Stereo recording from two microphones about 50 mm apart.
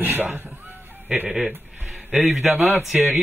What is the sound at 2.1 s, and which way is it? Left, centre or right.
Speech, centre.